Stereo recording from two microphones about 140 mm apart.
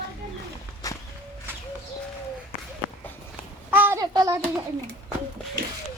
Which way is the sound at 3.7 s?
15° right (ahead or behind).